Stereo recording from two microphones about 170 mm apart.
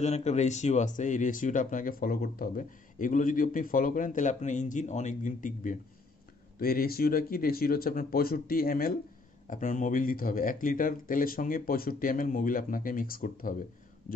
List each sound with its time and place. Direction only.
0.0 s speech: 40° left (ahead or behind)
6.6 s speech: 60° left (ahead or behind)